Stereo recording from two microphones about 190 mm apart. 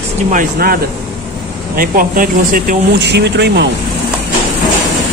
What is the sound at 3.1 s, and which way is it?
Speech, 65° right (ahead or behind).